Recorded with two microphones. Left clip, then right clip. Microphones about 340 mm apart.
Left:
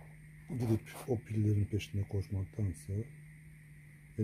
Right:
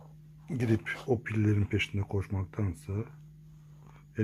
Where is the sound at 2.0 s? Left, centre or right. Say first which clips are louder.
Right 7 dB; centre.